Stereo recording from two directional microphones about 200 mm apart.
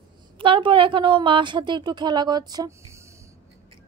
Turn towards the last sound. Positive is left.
turn(degrees=-15)  # may be behind; listen again after turning